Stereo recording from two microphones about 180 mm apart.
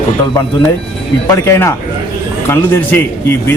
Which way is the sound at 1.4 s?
15° left (ahead or behind).